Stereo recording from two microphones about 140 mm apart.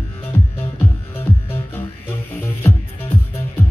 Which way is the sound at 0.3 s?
15° left (ahead or behind).